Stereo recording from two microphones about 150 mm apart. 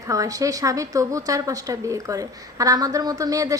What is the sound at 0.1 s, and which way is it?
A woman's voice, 20° right (ahead or behind).